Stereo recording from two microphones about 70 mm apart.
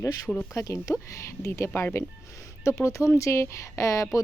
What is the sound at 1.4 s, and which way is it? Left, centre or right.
Speech, left.